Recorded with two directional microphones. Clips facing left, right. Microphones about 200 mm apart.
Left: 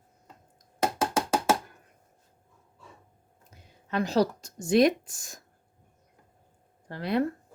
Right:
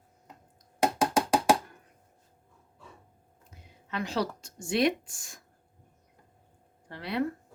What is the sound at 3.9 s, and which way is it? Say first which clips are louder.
Speech: left 6 dB; 40° left (ahead or behind).